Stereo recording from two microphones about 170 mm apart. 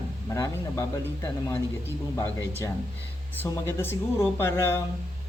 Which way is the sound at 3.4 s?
15° left (ahead or behind).